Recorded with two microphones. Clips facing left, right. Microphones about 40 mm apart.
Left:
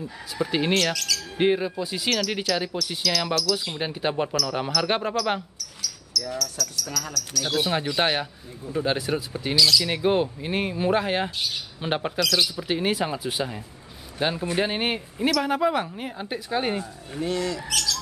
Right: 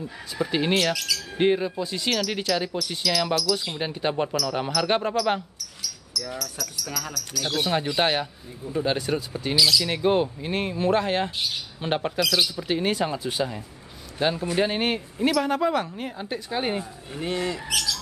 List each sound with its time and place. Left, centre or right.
0.4 s speech: centre
5.8 s speech: centre
7.4 s speech: centre
9.6 s speech: centre
9.8 s speech: centre
12.2 s speech: centre
17.2 s speech: right